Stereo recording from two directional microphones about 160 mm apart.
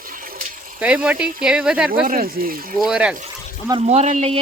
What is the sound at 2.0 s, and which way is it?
Speech, 60° right (ahead or behind).